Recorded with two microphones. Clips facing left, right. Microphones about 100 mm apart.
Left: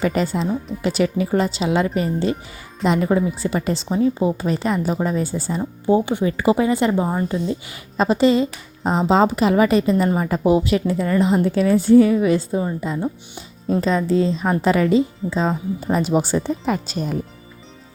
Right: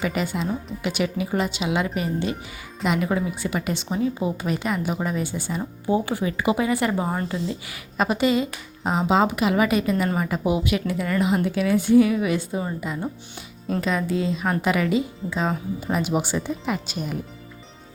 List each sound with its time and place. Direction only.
0.0 s speech: 40° left (ahead or behind)
5.8 s a woman's voice: 25° left (ahead or behind)
13.8 s speech: 35° left (ahead or behind)